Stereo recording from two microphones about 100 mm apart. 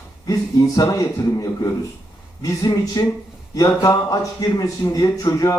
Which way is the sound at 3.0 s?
35° left (ahead or behind).